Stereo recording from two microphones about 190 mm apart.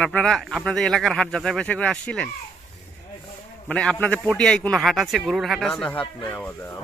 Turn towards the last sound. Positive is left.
turn(degrees=10)  # may be behind; listen again after turning